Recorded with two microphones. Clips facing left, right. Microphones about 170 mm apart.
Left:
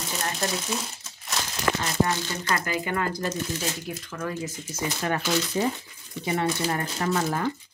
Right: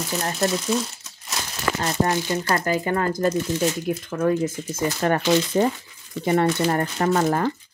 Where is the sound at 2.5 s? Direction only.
40° right (ahead or behind).